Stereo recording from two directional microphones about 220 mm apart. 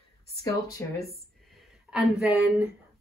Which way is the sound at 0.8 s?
10° left (ahead or behind).